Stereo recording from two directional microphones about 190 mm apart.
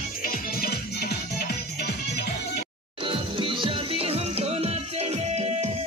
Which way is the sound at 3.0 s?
25° right (ahead or behind).